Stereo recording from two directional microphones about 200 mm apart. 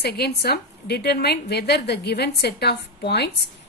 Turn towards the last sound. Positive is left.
turn(degrees=55)  # may be behind; listen again after turning